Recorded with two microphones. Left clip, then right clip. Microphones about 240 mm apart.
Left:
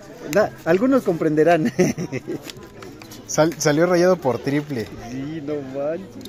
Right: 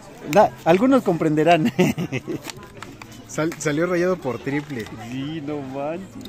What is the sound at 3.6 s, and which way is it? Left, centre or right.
Speech, centre.